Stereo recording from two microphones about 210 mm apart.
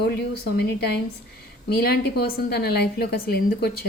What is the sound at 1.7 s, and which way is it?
A woman's voice, 50° left (ahead or behind).